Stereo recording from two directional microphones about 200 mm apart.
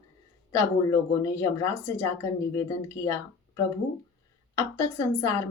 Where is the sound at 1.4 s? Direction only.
15° left (ahead or behind).